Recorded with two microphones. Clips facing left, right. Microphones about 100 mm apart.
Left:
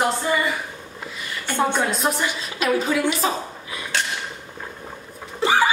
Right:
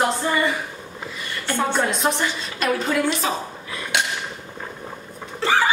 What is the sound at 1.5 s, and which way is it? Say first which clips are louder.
Speech: left 1 dB; 15° left (ahead or behind).